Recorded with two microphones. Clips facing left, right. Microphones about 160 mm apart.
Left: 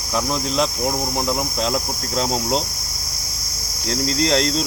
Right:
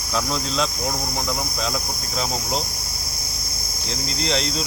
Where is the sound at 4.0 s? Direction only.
85° left.